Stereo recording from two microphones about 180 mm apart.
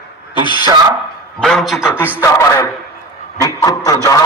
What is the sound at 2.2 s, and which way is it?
A man's voice, 15° left (ahead or behind).